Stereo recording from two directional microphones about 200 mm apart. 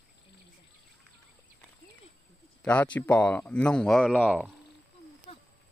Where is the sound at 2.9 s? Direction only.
5° left (ahead or behind).